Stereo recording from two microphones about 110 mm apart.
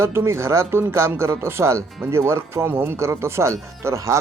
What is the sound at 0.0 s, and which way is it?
Speech, 25° right (ahead or behind).